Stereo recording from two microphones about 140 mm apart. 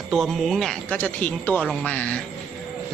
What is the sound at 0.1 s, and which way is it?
Speech, centre (ahead or behind).